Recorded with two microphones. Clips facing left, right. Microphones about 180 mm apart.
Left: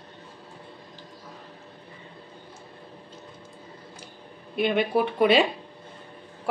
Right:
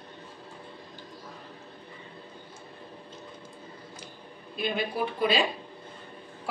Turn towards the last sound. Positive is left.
turn(degrees=65)  # may be behind; listen again after turning